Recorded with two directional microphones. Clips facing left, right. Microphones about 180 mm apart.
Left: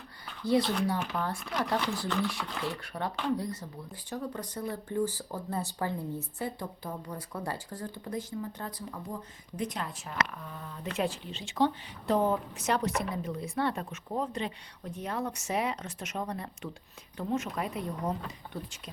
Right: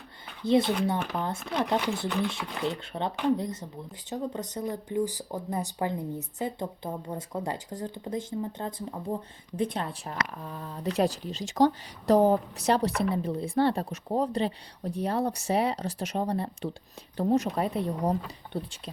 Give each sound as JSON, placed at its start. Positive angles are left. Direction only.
{"t": 0.4, "sound": "a woman's voice", "side_deg": -20}